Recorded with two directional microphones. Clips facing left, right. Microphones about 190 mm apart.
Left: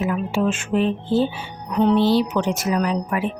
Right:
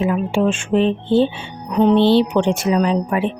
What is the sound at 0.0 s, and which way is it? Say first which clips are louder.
Speech: right 4 dB; 30° right (ahead or behind).